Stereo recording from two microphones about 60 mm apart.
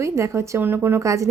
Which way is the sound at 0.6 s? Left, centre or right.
Right.